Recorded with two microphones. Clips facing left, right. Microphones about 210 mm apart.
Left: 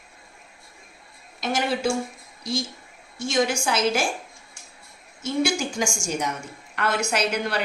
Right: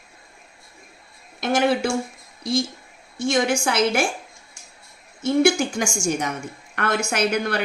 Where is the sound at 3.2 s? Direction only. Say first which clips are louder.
Right 3 dB; 55° right (ahead or behind).